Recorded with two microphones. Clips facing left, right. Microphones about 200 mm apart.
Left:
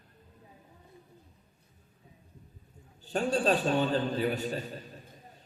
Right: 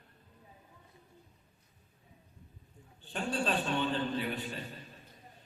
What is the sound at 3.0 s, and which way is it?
A man's voice, 40° left (ahead or behind).